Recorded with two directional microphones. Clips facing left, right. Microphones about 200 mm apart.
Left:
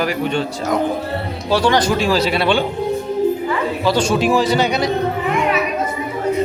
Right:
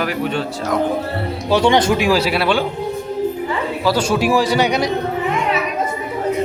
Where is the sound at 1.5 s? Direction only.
25° right (ahead or behind).